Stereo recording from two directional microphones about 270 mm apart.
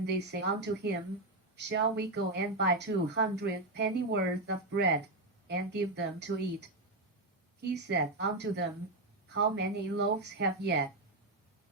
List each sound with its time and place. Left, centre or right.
0.0 s speech: right